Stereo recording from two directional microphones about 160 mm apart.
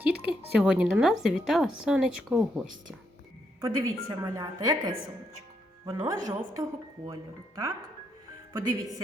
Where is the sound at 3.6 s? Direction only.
20° right (ahead or behind).